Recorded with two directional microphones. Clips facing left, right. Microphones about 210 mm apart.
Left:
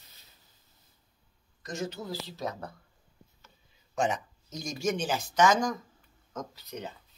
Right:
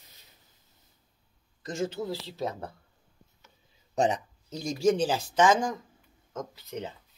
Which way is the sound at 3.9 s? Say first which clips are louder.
Right 3 dB; 35° right (ahead or behind).